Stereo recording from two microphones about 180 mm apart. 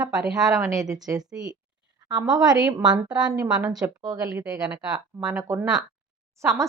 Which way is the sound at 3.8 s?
20° right (ahead or behind).